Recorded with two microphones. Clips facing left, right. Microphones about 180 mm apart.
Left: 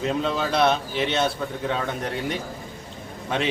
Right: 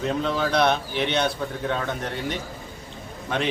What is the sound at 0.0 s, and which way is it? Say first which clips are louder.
A man's voice: even; centre (ahead or behind).